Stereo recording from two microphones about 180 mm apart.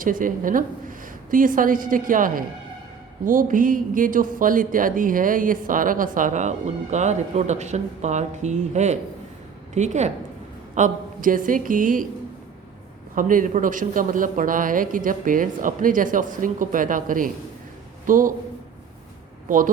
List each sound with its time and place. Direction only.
0.0 s a woman's voice: 50° right (ahead or behind)
13.1 s speech: 50° right (ahead or behind)
19.5 s speech: 45° right (ahead or behind)